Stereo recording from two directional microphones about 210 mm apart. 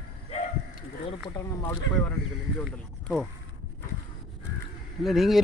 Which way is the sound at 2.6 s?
Centre (ahead or behind).